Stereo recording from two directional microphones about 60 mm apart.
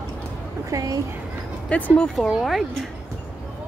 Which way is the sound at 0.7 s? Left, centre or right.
Right.